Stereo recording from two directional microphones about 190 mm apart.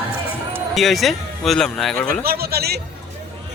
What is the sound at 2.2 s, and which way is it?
Speech, 55° right (ahead or behind).